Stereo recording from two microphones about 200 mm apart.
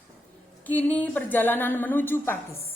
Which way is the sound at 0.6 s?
10° left (ahead or behind).